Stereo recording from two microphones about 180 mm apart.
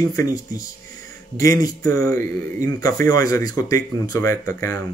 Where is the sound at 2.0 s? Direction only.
50° right (ahead or behind).